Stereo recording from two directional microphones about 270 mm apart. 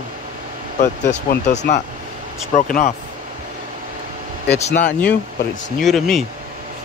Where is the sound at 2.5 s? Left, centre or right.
Left.